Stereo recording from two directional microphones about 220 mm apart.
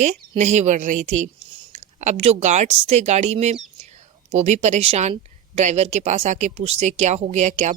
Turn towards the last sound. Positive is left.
turn(degrees=-30)  # may be behind; listen again after turning